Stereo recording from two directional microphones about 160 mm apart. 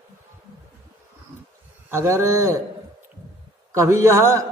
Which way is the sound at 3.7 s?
15° right (ahead or behind).